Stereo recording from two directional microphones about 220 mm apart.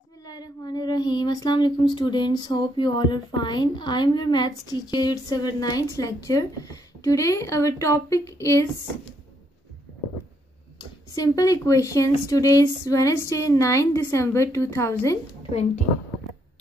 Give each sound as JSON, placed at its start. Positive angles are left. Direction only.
{"t": 0.2, "sound": "speech", "side_deg": 15}
{"t": 10.8, "sound": "speech", "side_deg": 15}